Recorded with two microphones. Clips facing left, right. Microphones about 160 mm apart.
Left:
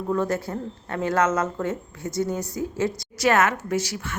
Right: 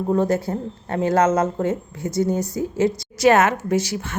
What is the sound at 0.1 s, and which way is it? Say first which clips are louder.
Speech: right 4 dB; 30° right (ahead or behind).